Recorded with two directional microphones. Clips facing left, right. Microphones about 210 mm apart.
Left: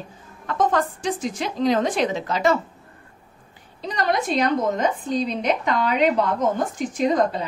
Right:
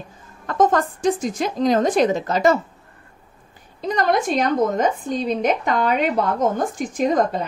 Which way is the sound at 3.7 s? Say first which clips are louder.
Right 4 dB; 50° right (ahead or behind).